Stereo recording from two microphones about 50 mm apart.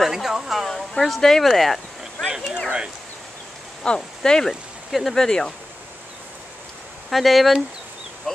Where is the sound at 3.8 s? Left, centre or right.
Centre.